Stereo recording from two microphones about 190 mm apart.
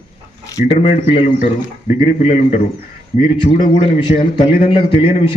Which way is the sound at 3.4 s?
25° left (ahead or behind).